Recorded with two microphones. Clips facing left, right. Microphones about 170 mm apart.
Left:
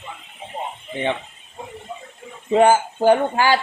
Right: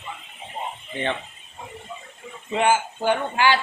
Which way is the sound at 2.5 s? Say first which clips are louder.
Left 6 dB; 40° left (ahead or behind).